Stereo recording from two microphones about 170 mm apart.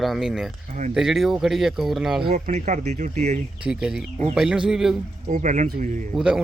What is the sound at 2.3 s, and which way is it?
Speech, 55° right (ahead or behind).